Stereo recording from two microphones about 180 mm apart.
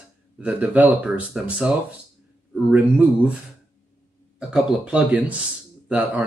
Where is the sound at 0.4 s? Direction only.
10° right (ahead or behind).